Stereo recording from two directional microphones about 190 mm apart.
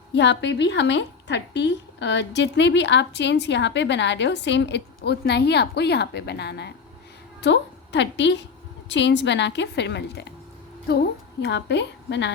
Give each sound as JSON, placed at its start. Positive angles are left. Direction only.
{"t": 0.1, "sound": "a woman's voice", "side_deg": 65}